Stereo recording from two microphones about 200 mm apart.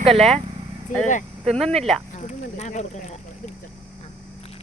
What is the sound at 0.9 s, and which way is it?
Speech, 40° left (ahead or behind).